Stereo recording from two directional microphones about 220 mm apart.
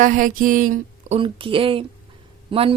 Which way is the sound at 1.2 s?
25° right (ahead or behind).